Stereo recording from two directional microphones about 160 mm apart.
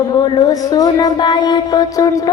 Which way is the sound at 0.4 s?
25° left (ahead or behind).